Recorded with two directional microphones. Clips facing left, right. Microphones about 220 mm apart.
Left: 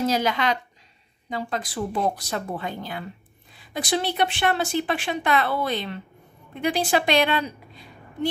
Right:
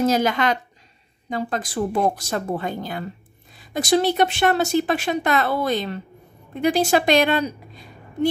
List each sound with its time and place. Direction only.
0.0 s a woman's voice: 50° right (ahead or behind)